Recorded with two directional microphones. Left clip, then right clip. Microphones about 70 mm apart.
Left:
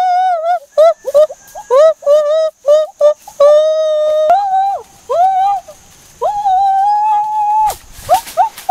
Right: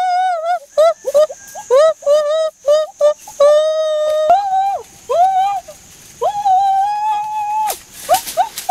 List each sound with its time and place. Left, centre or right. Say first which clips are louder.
0.0 s a sound: left 3 dB; centre
8.1 s horse: left 3 dB; right
8.4 s clip-clop: left 4 dB; right